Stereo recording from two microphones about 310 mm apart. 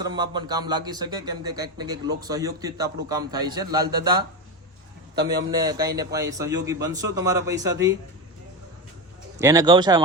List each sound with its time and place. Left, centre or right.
0.0 s speech: centre
5.2 s a man's voice: right
5.5 s speech: centre
9.4 s speech: centre